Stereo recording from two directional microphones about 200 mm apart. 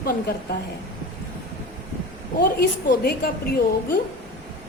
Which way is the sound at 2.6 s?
50° left (ahead or behind).